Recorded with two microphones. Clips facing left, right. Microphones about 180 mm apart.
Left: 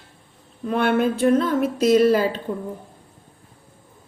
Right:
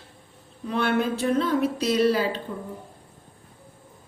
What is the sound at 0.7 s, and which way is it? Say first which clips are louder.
A woman's voice: left 4 dB; 50° left (ahead or behind).